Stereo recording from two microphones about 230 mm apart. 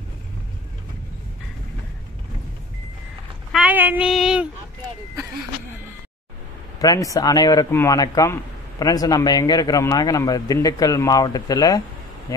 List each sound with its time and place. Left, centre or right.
3.5 s child singing: centre
6.8 s speech: centre